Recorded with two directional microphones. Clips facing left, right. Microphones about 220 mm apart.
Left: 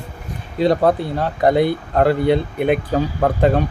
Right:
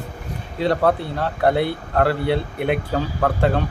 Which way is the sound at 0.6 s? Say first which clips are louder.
Left 3 dB; 15° left (ahead or behind).